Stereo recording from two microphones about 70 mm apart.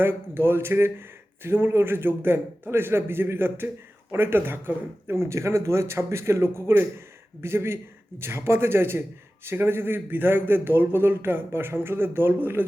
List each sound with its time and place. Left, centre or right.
0.0 s a man's voice: right